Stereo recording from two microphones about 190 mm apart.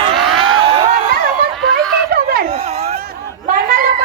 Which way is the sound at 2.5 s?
35° right (ahead or behind).